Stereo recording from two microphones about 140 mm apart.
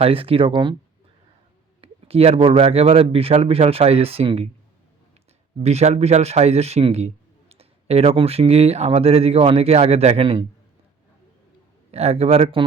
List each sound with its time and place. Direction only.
0.0 s speech: 40° right (ahead or behind)
1.8 s a man's voice: 45° right (ahead or behind)
5.5 s a man's voice: 50° right (ahead or behind)
11.9 s a man's voice: 50° right (ahead or behind)